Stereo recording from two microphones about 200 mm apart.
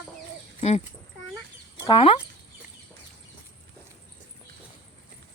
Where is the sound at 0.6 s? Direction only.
35° left (ahead or behind).